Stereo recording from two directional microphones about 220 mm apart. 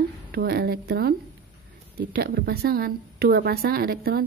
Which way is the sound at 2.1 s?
45° right (ahead or behind).